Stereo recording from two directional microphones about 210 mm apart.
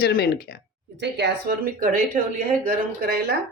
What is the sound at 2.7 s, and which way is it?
Speech, 45° right (ahead or behind).